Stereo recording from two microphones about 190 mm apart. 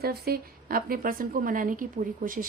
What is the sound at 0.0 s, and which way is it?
A woman's voice, 55° right (ahead or behind).